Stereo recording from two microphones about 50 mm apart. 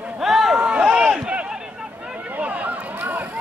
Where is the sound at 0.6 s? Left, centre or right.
Right.